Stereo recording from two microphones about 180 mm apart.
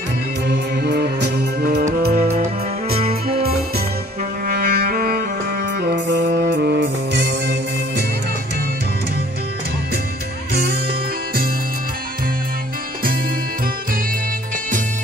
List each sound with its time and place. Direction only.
0.5 s music: 65° right (ahead or behind)
4.5 s music: 55° right (ahead or behind); by 7.5 s 70° right (ahead or behind)
10.5 s music: 60° right (ahead or behind)